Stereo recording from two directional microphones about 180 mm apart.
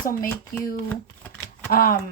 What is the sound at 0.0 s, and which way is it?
Speech, 50° left (ahead or behind).